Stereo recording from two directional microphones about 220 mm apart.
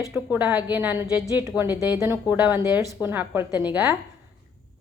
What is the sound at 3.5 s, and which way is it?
Speech, 20° left (ahead or behind).